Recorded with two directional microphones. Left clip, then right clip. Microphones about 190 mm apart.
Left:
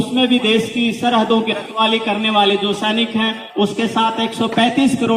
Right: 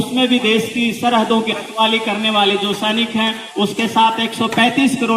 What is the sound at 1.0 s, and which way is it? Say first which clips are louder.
Speech: even; 30° right (ahead or behind).